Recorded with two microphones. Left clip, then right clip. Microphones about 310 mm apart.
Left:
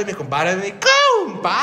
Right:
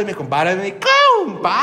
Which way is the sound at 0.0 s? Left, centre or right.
Centre.